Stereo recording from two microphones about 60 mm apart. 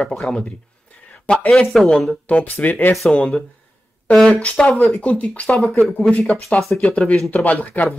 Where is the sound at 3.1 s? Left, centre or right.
Centre.